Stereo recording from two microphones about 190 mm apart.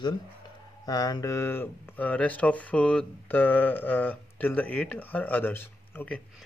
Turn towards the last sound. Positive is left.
turn(degrees=10)  # may be behind; listen again after turning